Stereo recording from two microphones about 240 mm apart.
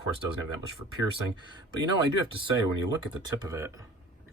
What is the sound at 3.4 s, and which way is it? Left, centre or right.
Speech, centre.